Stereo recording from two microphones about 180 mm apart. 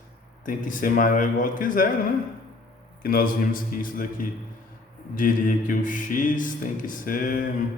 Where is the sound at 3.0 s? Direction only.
55° left (ahead or behind).